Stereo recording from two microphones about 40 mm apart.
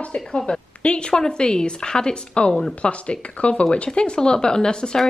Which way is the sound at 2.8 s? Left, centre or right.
Left.